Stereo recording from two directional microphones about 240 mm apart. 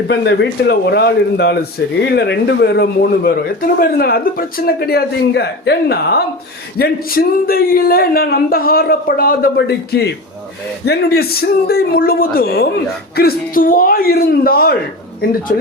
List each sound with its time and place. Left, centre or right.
0.1 s speech: left